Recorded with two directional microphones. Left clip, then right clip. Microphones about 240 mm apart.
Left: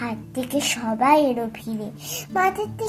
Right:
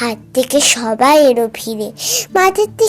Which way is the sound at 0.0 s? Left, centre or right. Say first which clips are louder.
Right 13 dB; right.